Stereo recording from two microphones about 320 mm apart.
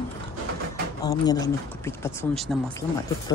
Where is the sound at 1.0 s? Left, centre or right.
Centre.